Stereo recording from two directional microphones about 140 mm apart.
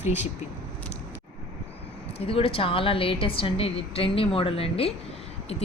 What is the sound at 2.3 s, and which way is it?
A woman's voice, 40° left (ahead or behind).